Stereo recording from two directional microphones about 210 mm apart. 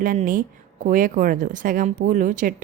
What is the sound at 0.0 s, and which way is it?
A woman's voice, 40° right (ahead or behind).